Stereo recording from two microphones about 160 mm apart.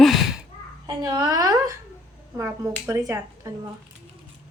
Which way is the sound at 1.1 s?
25° right (ahead or behind).